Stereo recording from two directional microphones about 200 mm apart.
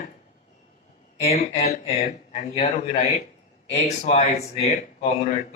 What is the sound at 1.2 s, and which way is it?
Speech, 30° left (ahead or behind).